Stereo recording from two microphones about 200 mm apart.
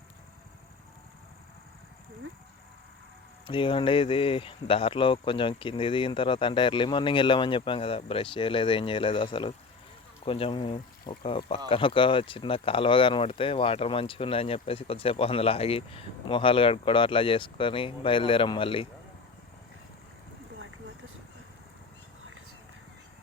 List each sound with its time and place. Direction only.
3.4 s speech: 25° left (ahead or behind)